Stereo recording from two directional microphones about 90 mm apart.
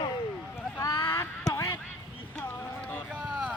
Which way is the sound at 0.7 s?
30° left (ahead or behind).